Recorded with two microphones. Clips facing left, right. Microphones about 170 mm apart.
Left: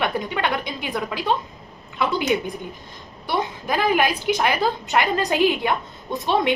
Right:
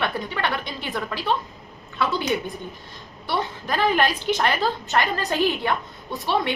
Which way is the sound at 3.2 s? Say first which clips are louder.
Left 2 dB; 15° left (ahead or behind).